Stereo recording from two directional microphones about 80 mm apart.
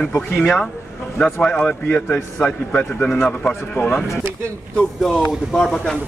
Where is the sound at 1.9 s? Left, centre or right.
Left.